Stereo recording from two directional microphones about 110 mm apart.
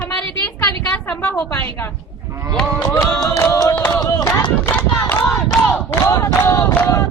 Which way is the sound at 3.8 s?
15° left (ahead or behind).